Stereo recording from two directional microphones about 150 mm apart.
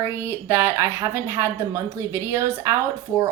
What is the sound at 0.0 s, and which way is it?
A woman's voice, 15° right (ahead or behind).